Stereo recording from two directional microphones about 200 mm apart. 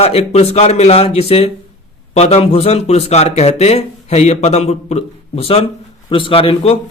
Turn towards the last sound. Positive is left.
turn(degrees=30)  # may be behind; listen again after turning